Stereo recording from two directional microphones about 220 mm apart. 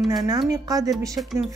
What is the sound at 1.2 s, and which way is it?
Speech, centre (ahead or behind).